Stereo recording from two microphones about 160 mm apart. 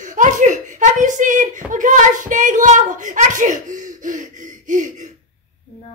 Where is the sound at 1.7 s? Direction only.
55° right (ahead or behind).